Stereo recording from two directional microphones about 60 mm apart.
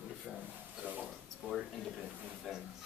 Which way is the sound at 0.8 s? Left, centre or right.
Right.